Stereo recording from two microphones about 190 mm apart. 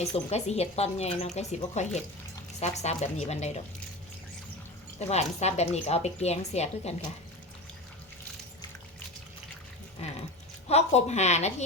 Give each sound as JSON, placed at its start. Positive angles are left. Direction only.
{"t": 0.0, "sound": "speech", "side_deg": 35}
{"t": 4.9, "sound": "speech", "side_deg": 35}
{"t": 10.0, "sound": "dog", "side_deg": 35}
{"t": 10.7, "sound": "speech", "side_deg": 35}